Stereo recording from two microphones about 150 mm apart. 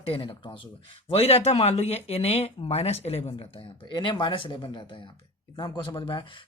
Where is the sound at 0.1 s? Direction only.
35° left (ahead or behind).